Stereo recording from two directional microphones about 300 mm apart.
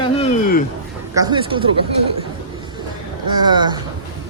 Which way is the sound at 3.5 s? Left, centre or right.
Centre.